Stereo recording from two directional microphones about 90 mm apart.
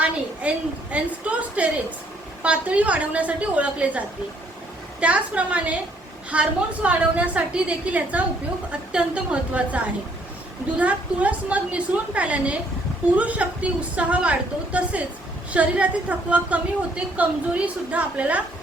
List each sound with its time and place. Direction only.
0.0 s a woman's voice: 15° right (ahead or behind)